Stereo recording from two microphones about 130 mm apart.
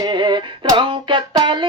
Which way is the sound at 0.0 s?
35° right (ahead or behind).